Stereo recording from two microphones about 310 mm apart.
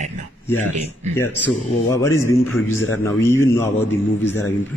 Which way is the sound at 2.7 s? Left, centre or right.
Left.